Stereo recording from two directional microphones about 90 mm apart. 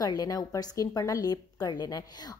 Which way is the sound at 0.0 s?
45° left (ahead or behind).